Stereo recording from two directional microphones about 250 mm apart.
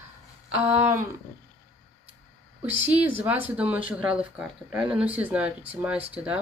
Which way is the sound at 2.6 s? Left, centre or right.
Centre.